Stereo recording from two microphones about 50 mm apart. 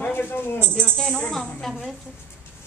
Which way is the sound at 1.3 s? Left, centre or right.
Centre.